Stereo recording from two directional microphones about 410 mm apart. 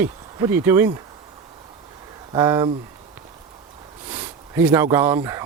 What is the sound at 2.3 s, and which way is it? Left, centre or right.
Speech, centre.